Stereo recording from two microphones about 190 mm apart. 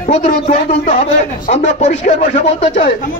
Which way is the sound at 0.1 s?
40° left (ahead or behind).